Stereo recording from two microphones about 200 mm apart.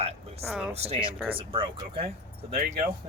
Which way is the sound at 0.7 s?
30° right (ahead or behind).